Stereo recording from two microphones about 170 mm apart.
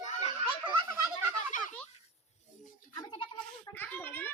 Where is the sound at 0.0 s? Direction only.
40° left (ahead or behind).